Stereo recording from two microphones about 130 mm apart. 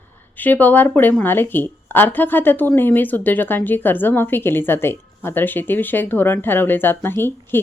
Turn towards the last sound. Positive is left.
turn(degrees=15)  # may be behind; listen again after turning